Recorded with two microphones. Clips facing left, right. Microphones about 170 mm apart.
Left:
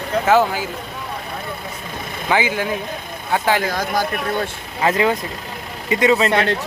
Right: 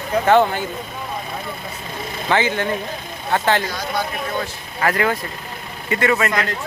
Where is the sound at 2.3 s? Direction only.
10° left (ahead or behind).